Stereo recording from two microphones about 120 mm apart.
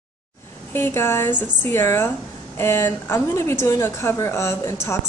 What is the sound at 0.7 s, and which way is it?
A woman's voice, 20° left (ahead or behind).